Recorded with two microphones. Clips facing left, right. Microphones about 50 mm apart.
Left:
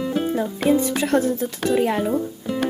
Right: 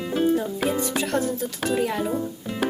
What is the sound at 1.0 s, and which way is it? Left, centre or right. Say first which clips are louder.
Speech: left 5 dB; left.